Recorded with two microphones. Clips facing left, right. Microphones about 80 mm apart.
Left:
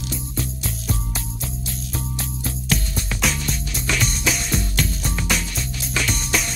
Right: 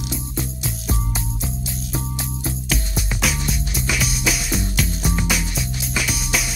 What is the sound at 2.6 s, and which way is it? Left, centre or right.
Music, centre.